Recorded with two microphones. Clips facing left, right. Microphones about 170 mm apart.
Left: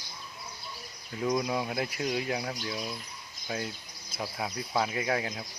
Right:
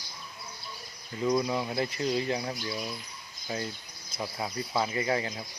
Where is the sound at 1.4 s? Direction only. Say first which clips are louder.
Right 1 dB; 10° left (ahead or behind).